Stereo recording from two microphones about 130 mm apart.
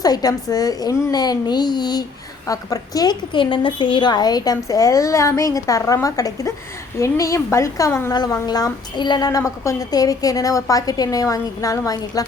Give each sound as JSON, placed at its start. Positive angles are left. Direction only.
{"t": 0.0, "sound": "a child's voice", "side_deg": 30}
{"t": 8.1, "sound": "a woman's voice", "side_deg": 30}